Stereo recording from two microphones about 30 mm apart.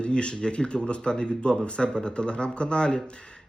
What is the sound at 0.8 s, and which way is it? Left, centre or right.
Speech, left.